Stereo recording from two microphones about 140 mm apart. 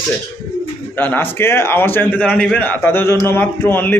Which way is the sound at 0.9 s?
15° left (ahead or behind).